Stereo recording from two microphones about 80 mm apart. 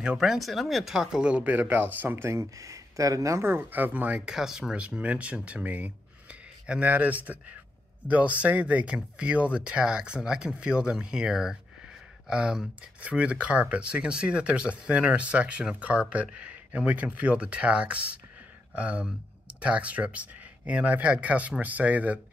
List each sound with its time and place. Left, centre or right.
0.0 s speech: centre; by 2.2 s right
2.2 s speech: right; by 4.2 s centre
4.3 s speech: centre